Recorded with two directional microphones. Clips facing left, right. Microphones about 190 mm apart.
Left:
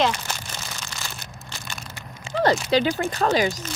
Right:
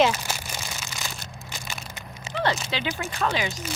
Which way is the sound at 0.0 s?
5° right (ahead or behind).